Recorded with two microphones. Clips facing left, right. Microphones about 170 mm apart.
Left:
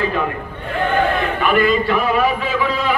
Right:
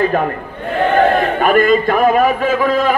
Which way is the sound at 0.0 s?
50° right (ahead or behind).